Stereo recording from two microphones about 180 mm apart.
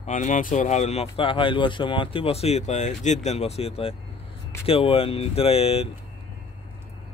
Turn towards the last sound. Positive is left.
turn(degrees=35)  # may be behind; listen again after turning